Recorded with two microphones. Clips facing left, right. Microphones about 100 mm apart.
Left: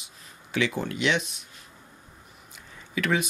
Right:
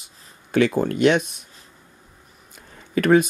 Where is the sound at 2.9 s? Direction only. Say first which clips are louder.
Right 10 dB; 45° right (ahead or behind).